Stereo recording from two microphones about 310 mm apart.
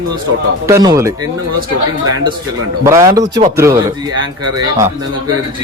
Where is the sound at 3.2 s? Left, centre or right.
Right.